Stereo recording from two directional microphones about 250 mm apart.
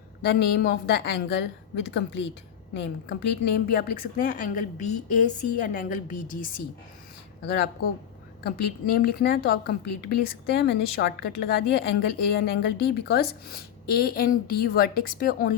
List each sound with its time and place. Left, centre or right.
0.3 s a woman's voice: left